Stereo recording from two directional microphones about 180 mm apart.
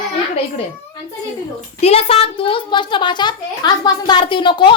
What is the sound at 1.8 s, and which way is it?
A woman's voice, 35° left (ahead or behind).